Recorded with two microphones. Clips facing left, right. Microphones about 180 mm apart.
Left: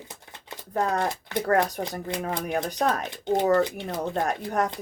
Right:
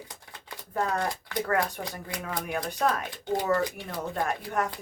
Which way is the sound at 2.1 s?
25° left (ahead or behind).